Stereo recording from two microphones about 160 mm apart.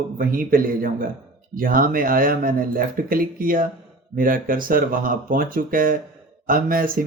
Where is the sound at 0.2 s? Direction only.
60° right (ahead or behind).